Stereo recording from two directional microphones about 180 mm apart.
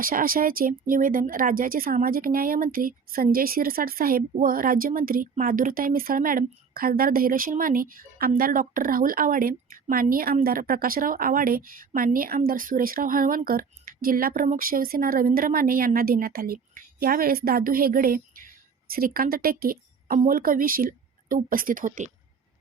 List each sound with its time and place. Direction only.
0.0 s a woman's voice: 50° right (ahead or behind)